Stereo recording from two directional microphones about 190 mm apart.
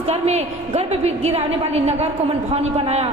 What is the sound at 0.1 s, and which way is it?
A woman's voice, 35° right (ahead or behind).